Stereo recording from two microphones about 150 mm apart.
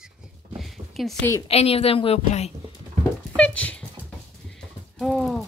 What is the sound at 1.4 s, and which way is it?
A woman's voice, 40° left (ahead or behind).